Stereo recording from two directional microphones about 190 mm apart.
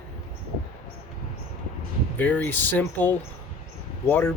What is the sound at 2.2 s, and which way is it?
Speech, 10° left (ahead or behind).